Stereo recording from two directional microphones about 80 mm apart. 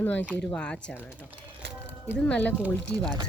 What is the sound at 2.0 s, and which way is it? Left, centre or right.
Speech, centre.